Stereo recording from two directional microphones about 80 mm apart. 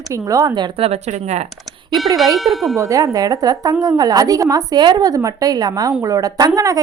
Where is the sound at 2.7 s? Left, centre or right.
Right.